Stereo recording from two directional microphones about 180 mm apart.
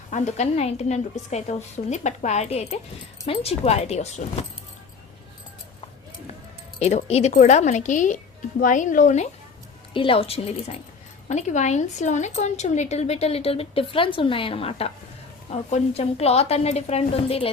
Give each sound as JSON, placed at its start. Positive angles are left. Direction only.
{"t": 0.1, "sound": "a woman's voice", "side_deg": 40}
{"t": 6.7, "sound": "a woman's voice", "side_deg": 35}
{"t": 9.9, "sound": "a woman's voice", "side_deg": 30}